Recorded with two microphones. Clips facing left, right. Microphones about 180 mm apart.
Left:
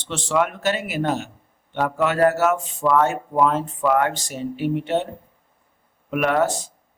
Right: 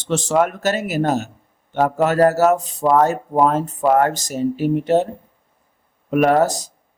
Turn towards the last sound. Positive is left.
turn(degrees=-40)  # may be behind; listen again after turning